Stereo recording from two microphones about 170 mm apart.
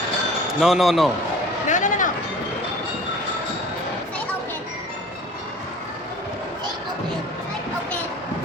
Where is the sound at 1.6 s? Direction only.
45° left (ahead or behind).